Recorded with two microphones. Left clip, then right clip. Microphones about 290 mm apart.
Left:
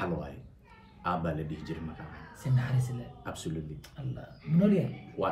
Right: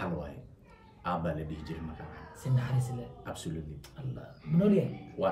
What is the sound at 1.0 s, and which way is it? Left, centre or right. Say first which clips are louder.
Speech: left 1 dB; centre.